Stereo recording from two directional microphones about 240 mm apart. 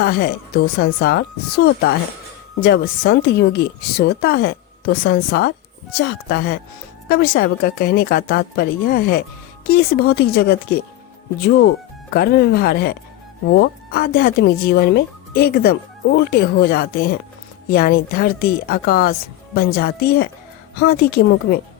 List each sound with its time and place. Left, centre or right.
0.0 s speech: left